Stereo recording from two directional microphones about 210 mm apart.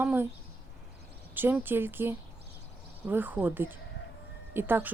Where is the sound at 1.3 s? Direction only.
10° right (ahead or behind).